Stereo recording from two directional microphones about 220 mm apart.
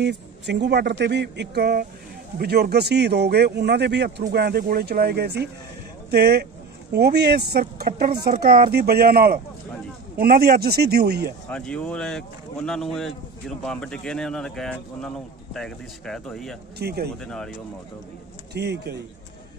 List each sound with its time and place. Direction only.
0.0 s speech: 50° right (ahead or behind)
11.4 s speech: 5° left (ahead or behind)
16.7 s speech: 45° right (ahead or behind)
17.2 s speech: centre (ahead or behind)
18.5 s speech: 50° right (ahead or behind)